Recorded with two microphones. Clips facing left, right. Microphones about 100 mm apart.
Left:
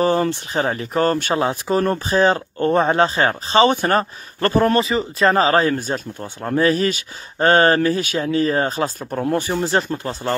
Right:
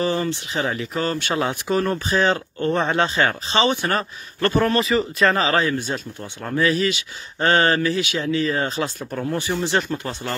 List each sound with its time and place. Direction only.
0.0 s speech: 50° left (ahead or behind)
1.3 s speech: 35° left (ahead or behind)